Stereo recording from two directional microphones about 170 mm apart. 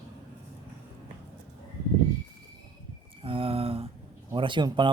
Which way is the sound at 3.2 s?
30° right (ahead or behind).